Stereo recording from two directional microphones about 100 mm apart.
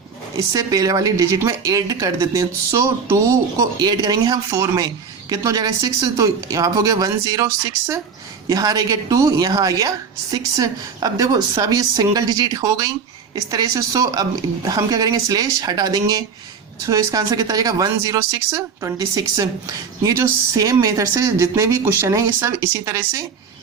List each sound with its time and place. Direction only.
0.5 s speech: 35° right (ahead or behind)
8.4 s speech: 35° right (ahead or behind)